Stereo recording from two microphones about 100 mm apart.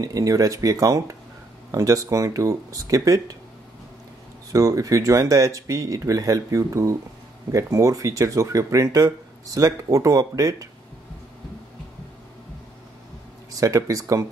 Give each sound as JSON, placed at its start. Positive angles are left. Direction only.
{"t": 0.0, "sound": "speech", "side_deg": -35}
{"t": 4.5, "sound": "speech", "side_deg": -35}
{"t": 13.5, "sound": "speech", "side_deg": -35}